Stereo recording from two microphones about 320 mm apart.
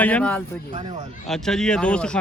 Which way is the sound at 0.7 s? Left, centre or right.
Centre.